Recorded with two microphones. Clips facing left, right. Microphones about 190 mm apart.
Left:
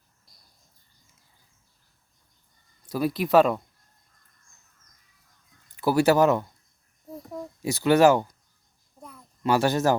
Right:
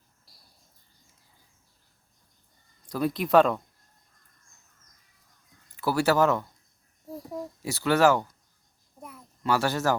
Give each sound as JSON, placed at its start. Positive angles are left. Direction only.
{"t": 2.8, "sound": "speech", "side_deg": 5}
{"t": 5.7, "sound": "speech", "side_deg": 15}
{"t": 7.1, "sound": "a sound", "side_deg": -5}
{"t": 7.6, "sound": "speech", "side_deg": 15}
{"t": 9.0, "sound": "a sound", "side_deg": -5}
{"t": 9.4, "sound": "speech", "side_deg": 20}